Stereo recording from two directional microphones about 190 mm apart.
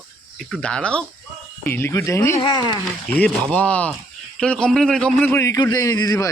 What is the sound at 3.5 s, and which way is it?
A man's voice, 5° left (ahead or behind).